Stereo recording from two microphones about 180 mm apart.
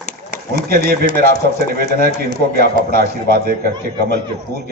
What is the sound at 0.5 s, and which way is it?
A man's voice, 55° right (ahead or behind).